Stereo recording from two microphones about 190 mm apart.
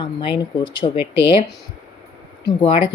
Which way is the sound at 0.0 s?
25° left (ahead or behind).